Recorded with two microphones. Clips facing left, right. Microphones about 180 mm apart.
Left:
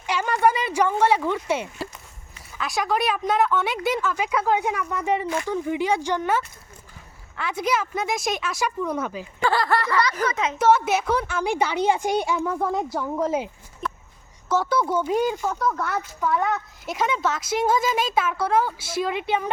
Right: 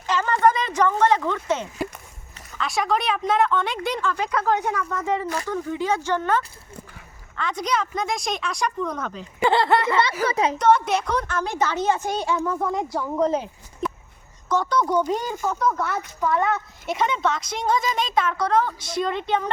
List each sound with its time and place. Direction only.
0.1 s a sound: 10° left (ahead or behind)
2.5 s a woman's voice: centre (ahead or behind)
9.4 s a sound: 20° right (ahead or behind)
10.2 s a woman's voice: 35° right (ahead or behind)
10.6 s speech: 5° left (ahead or behind)
14.5 s a woman's voice: 5° left (ahead or behind)